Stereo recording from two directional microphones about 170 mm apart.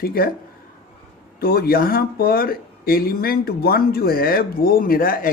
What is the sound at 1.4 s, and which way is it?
Speech, 60° left (ahead or behind).